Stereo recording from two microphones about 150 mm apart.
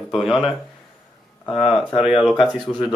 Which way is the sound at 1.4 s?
35° left (ahead or behind).